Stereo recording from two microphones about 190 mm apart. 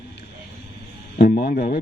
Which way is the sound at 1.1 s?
55° left (ahead or behind).